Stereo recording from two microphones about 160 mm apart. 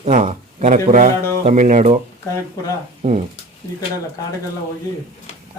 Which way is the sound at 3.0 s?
35° right (ahead or behind).